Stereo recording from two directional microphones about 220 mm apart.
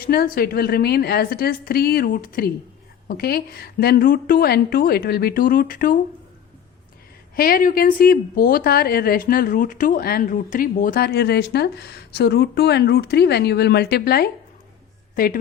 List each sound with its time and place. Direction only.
0.0 s a woman's voice: 45° left (ahead or behind)
7.3 s a woman's voice: 40° left (ahead or behind)